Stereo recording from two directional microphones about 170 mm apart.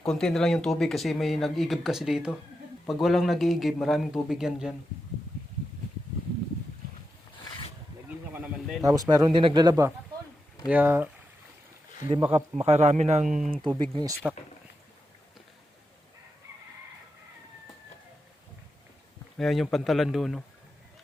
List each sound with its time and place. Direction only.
0.0 s speech: 5° left (ahead or behind)
8.3 s speech: 15° right (ahead or behind)
10.7 s speech: 10° right (ahead or behind)
12.1 s speech: 35° right (ahead or behind)
13.9 s speech: 20° right (ahead or behind)
19.4 s speech: centre (ahead or behind)